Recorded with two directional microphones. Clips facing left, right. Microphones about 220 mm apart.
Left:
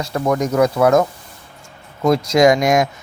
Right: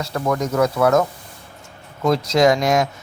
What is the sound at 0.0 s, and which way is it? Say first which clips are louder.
Speech: left 3 dB; 15° left (ahead or behind).